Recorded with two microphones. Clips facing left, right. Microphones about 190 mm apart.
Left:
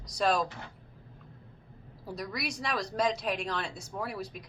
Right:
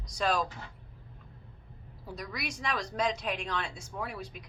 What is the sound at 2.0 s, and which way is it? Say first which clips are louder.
A woman's voice: left 3 dB; 35° left (ahead or behind).